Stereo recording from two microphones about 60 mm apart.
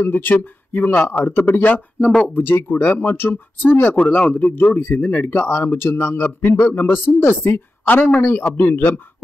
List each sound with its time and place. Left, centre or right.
0.0 s speech: left
4.0 s a man's voice: centre
4.3 s speech: left
7.8 s speech: left